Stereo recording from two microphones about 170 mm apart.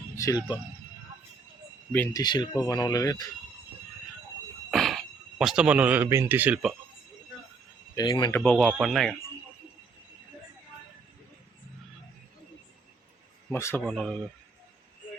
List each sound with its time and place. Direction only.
0.2 s speech: 20° left (ahead or behind)
2.1 s speech: 25° left (ahead or behind)
4.7 s speech: centre (ahead or behind)
7.9 s speech: 25° left (ahead or behind)
8.4 s speech: 10° left (ahead or behind)
13.5 s speech: 15° left (ahead or behind)
13.8 s speech: 5° left (ahead or behind)